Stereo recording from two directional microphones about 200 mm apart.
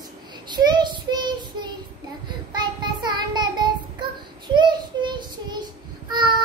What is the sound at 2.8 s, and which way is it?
Child singing, 20° right (ahead or behind).